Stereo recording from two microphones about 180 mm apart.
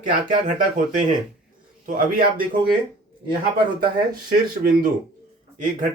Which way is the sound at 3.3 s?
25° right (ahead or behind).